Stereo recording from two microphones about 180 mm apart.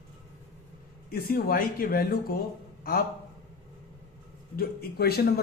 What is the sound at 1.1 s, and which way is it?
A man's voice, 55° left (ahead or behind).